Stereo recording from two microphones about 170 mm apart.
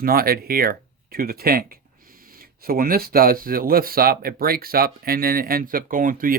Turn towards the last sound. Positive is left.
turn(degrees=-55)  # may be behind; listen again after turning